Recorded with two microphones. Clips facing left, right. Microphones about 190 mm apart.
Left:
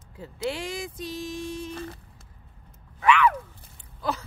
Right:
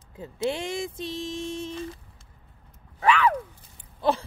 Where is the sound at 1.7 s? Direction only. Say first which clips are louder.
Right 2 dB; 60° left (ahead or behind).